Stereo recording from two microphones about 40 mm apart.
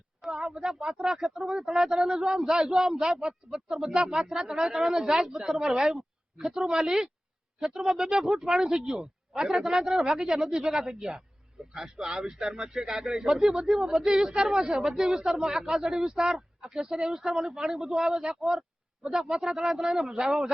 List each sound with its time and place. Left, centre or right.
0.2 s a sound: centre
0.4 s speech: centre
14.7 s speech: centre